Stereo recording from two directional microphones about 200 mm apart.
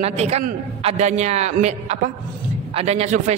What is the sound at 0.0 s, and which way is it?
A man's voice, 30° right (ahead or behind).